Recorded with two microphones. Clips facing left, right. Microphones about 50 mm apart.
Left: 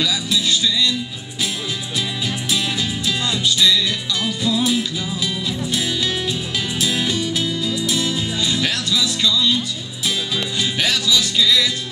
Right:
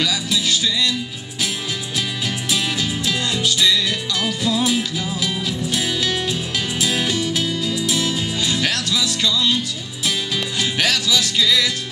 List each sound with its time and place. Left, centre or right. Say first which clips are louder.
0.0 s music: left 1 dB; right
2.5 s music: right 1 dB; right
4.1 s music: even; right
6.8 s music: even; right
7.2 s music: even; right
10.6 s music: right 1 dB; right